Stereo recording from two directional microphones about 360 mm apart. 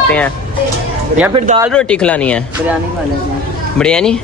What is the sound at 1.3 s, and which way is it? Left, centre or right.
Speech, centre.